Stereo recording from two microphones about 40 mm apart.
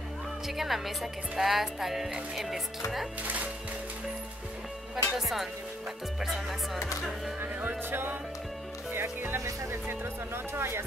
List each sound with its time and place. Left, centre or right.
0.5 s speech: centre
1.4 s music: centre
2.3 s speech: centre
3.2 s speech: right
4.9 s speech: centre
8.9 s speech: right